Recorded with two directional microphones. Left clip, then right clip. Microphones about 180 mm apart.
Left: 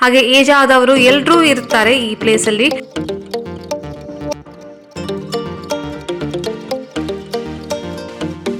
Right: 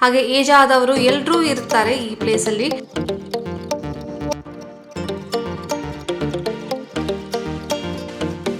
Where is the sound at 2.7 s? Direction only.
Centre (ahead or behind).